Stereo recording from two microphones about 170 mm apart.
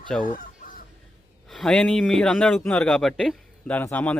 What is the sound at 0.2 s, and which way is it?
Chicken, 50° left (ahead or behind).